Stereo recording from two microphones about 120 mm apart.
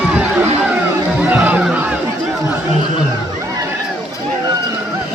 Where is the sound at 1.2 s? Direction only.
10° right (ahead or behind).